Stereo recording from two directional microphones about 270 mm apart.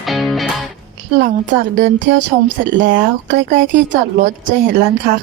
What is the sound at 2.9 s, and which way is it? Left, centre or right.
A woman's voice, right.